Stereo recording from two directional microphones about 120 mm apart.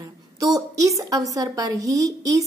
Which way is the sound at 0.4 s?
30° right (ahead or behind).